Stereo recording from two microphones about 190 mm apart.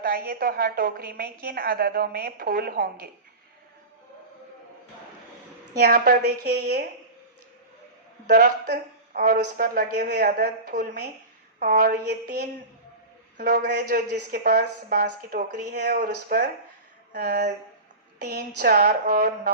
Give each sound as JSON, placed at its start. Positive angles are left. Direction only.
{"t": 0.0, "sound": "a woman's voice", "side_deg": -50}
{"t": 5.8, "sound": "a woman's voice", "side_deg": -45}
{"t": 6.2, "sound": "a woman's voice", "side_deg": -60}
{"t": 8.4, "sound": "a woman's voice", "side_deg": -60}
{"t": 11.6, "sound": "a woman's voice", "side_deg": -45}
{"t": 13.6, "sound": "a woman's voice", "side_deg": -60}